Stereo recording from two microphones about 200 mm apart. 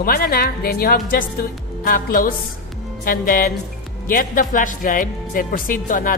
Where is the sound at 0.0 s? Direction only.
45° left (ahead or behind).